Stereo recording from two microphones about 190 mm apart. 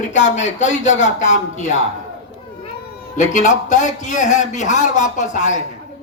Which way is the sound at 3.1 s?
40° left (ahead or behind).